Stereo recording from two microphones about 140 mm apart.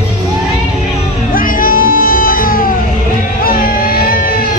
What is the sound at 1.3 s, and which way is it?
Music, 85° left.